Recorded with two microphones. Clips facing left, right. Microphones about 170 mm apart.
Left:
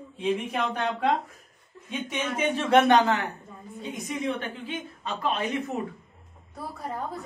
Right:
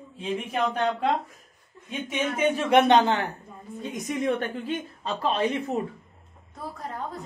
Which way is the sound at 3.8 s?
45° right (ahead or behind).